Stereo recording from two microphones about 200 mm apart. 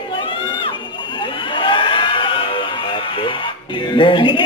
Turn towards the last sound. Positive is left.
turn(degrees=25)  # may be behind; listen again after turning